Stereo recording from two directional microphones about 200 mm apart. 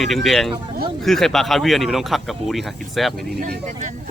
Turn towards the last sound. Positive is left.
turn(degrees=-40)  # may be behind; listen again after turning